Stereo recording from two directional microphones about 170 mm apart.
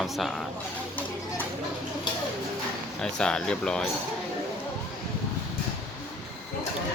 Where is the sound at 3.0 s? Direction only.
5° left (ahead or behind).